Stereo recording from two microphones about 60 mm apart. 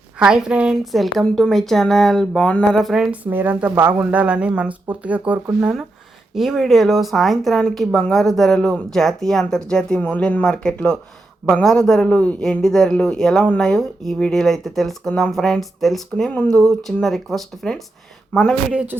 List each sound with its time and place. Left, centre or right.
0.3 s a woman's voice: centre
0.9 s speech: centre
2.9 s a woman's voice: centre
3.2 s speech: right
6.3 s speech: centre
10.0 s speech: left
12.0 s speech: left
12.4 s speech: centre
18.3 s speech: centre